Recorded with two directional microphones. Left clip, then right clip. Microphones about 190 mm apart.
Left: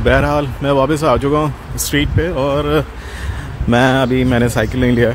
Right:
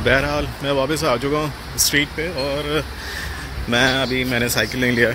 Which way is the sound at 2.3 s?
40° left (ahead or behind).